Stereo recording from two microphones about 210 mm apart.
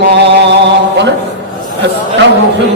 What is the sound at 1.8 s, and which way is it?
Speech, 55° right (ahead or behind).